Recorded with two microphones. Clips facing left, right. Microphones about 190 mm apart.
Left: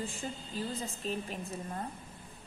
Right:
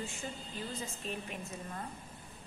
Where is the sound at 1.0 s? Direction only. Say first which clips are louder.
Left 4 dB; 35° left (ahead or behind).